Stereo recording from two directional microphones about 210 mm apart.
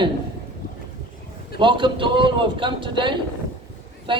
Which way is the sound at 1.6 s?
20° right (ahead or behind).